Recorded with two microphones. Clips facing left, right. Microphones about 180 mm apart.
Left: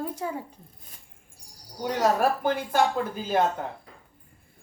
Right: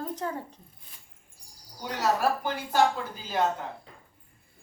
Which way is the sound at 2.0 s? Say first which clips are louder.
Left 3 dB; 50° left (ahead or behind).